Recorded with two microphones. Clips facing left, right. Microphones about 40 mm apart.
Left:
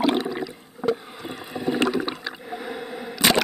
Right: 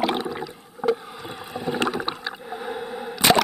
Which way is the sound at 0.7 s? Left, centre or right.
Centre.